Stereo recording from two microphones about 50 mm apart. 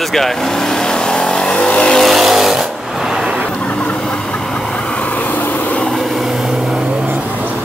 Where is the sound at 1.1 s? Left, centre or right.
Centre.